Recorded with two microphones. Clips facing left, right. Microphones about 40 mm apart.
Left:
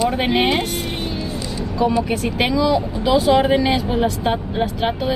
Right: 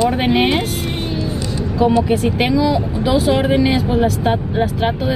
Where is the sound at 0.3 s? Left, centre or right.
Centre.